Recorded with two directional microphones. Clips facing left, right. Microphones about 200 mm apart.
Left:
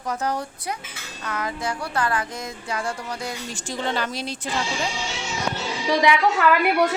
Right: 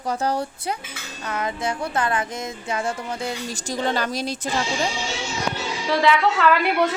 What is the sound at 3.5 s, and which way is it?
Speech, 40° right (ahead or behind).